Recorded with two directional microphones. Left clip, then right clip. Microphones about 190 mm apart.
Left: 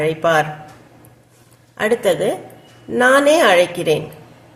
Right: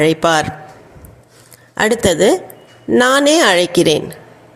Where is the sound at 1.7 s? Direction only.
45° right (ahead or behind).